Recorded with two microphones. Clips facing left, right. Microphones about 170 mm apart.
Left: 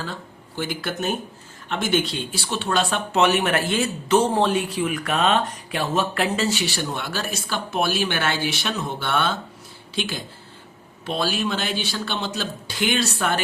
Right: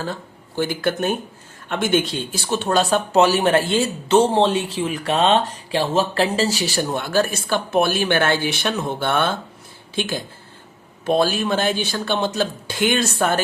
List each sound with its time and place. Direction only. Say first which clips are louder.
0.0 s speech: right 4 dB; 45° right (ahead or behind)